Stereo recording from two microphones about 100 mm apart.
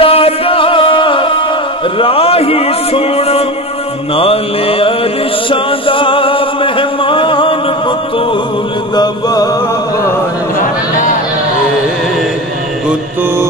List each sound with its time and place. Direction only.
0.0 s music: 70° left (ahead or behind)
2.0 s speech: 70° left (ahead or behind)
4.1 s mantra: 70° left (ahead or behind)
5.5 s music: 60° left (ahead or behind)
8.9 s music: 40° left (ahead or behind)